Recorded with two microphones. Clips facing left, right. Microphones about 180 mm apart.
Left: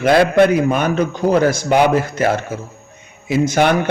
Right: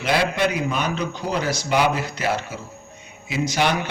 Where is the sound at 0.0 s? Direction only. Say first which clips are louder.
Left 9 dB; 50° left (ahead or behind).